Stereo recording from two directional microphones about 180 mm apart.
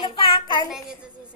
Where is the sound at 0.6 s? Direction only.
5° right (ahead or behind).